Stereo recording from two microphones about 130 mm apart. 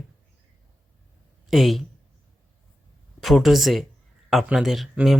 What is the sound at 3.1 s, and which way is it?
Speech, centre (ahead or behind).